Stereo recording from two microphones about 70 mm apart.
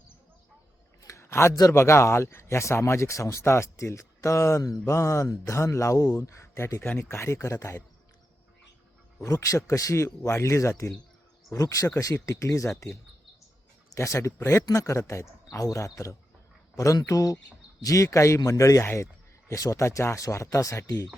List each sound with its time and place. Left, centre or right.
1.0 s a sound: left
1.7 s speech: left
4.9 s speech: left
9.2 s speech: left
13.9 s speech: left
14.6 s speech: left